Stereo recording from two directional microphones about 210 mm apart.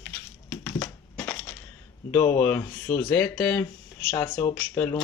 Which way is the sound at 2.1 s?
10° left (ahead or behind).